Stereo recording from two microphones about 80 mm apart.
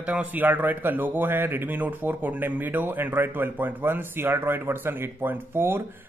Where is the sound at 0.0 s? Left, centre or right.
Centre.